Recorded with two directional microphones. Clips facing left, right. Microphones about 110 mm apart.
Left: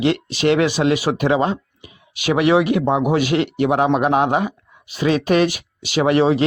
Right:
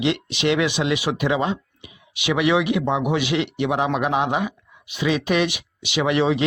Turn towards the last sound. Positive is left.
turn(degrees=40)  # may be behind; listen again after turning